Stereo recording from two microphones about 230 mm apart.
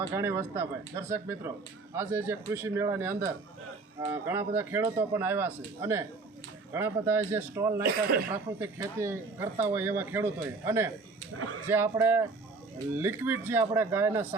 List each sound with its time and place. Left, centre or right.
0.1 s speech: centre
7.9 s speech: right
8.3 s speech: centre